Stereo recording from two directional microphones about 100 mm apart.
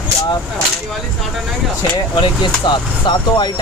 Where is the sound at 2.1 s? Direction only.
50° left (ahead or behind).